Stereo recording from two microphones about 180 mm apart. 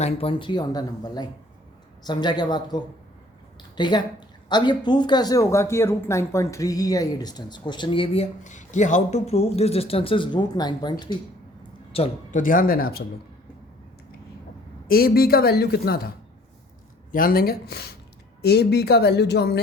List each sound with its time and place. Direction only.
0.0 s speech: 30° left (ahead or behind)
11.9 s speech: 35° left (ahead or behind)
12.4 s speech: 50° left (ahead or behind)
14.8 s speech: 55° left (ahead or behind)